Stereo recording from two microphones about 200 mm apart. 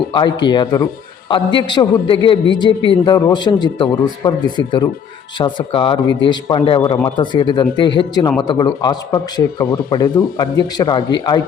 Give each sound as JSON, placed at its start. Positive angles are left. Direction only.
{"t": 0.1, "sound": "speech", "side_deg": 20}